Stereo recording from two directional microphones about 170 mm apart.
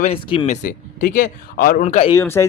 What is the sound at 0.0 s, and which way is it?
Speech, 35° left (ahead or behind).